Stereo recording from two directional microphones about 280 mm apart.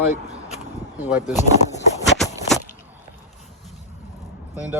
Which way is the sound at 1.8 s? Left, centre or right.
Left.